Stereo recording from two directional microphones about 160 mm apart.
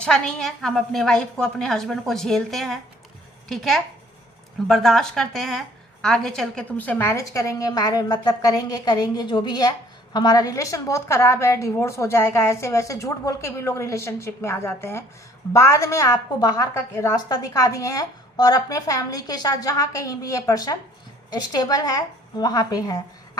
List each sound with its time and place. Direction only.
0.0 s a woman's voice: 5° left (ahead or behind); by 23.4 s 25° left (ahead or behind)